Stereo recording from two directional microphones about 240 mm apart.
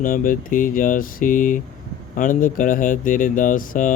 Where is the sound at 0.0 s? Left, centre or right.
Left.